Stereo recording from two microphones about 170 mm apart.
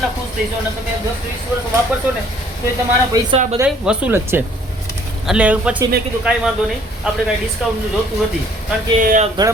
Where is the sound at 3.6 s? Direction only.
5° right (ahead or behind).